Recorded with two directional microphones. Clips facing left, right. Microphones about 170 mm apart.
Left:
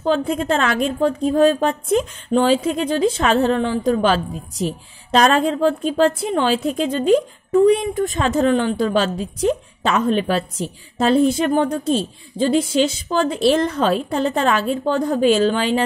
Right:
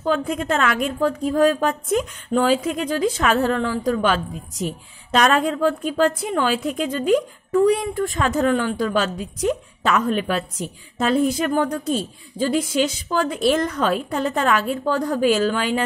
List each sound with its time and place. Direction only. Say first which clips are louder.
0.0 s a woman's voice: left 3 dB; 30° left (ahead or behind)